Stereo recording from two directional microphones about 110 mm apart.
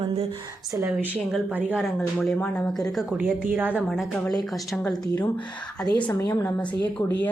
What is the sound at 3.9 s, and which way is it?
A woman's voice, 5° left (ahead or behind).